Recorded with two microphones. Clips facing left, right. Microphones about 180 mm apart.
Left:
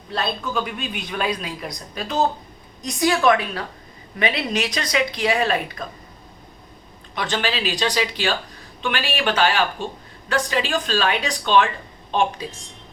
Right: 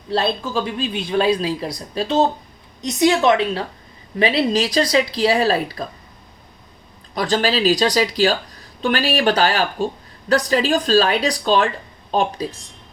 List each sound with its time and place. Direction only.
0.1 s a man's voice: 30° right (ahead or behind)
7.1 s speech: 35° right (ahead or behind)